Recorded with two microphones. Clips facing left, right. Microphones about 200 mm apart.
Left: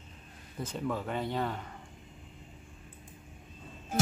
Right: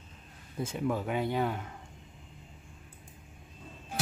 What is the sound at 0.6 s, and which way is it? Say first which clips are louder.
Speech: right 3 dB; 10° right (ahead or behind).